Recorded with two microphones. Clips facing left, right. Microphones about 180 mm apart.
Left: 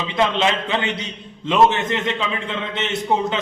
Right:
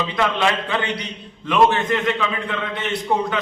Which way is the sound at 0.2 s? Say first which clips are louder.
Left 2 dB; 20° left (ahead or behind).